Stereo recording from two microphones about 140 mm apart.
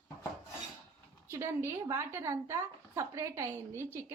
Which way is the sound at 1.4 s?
20° right (ahead or behind).